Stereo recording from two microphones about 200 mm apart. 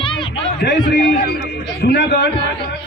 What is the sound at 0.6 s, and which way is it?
Speech, 55° left (ahead or behind).